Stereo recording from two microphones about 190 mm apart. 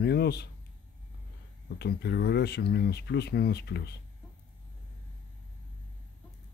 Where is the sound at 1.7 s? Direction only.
60° left (ahead or behind).